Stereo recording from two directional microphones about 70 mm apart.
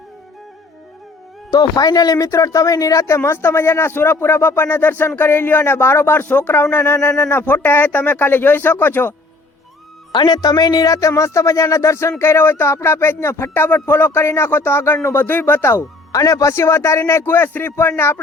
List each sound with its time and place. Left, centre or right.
1.5 s speech: left
3.2 s speech: left
10.1 s speech: left
16.1 s speech: left